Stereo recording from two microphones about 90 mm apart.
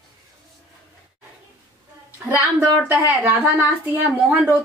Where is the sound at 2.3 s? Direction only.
15° right (ahead or behind).